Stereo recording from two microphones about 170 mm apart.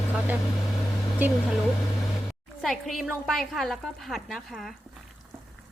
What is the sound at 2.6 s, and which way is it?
A woman's voice, centre (ahead or behind).